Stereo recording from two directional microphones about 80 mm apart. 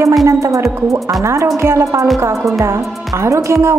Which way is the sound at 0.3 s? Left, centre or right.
Right.